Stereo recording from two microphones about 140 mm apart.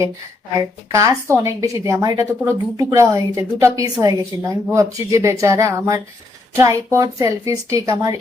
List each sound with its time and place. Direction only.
0.9 s a woman's voice: 25° right (ahead or behind)